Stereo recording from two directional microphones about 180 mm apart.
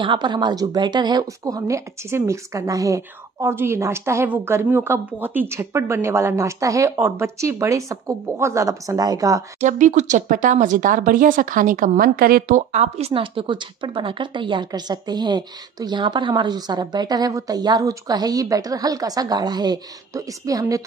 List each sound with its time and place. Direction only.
0.0 s speech: 25° right (ahead or behind)
9.6 s speech: 45° right (ahead or behind)
12.7 s a woman's voice: 35° right (ahead or behind); by 20.8 s 20° right (ahead or behind)